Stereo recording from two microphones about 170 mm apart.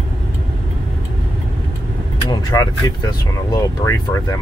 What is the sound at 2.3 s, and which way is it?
Vehicle, 25° left (ahead or behind).